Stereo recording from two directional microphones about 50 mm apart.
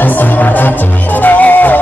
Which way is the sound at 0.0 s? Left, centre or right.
Left.